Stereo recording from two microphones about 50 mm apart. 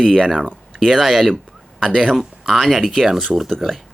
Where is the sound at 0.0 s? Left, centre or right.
Centre.